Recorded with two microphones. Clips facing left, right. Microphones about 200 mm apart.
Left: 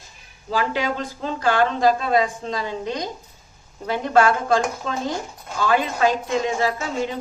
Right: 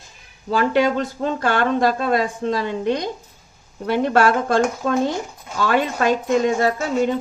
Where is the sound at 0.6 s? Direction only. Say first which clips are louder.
Right 8 dB; 50° right (ahead or behind).